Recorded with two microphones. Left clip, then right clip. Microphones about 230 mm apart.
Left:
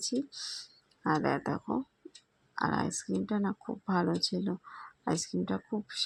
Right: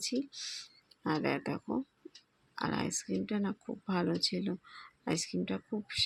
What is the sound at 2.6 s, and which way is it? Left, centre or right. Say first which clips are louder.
Speech: left 4 dB; centre.